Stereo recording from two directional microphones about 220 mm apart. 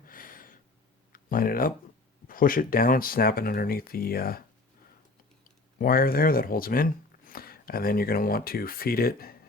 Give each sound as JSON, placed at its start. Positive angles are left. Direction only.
{"t": 0.0, "sound": "gasp", "side_deg": 40}
{"t": 1.1, "sound": "a sound", "side_deg": 40}
{"t": 2.2, "sound": "speech", "side_deg": 40}
{"t": 5.8, "sound": "speech", "side_deg": 40}